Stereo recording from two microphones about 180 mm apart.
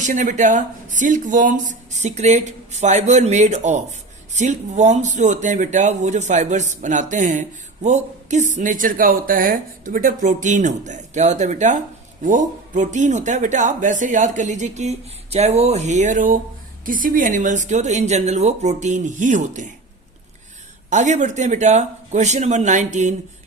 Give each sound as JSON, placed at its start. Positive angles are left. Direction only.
{"t": 0.0, "sound": "speech", "side_deg": -45}
{"t": 20.9, "sound": "speech", "side_deg": -40}